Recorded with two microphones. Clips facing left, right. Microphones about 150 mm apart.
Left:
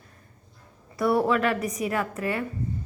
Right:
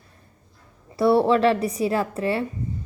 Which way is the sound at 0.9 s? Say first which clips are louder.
Right 5 dB; 30° right (ahead or behind).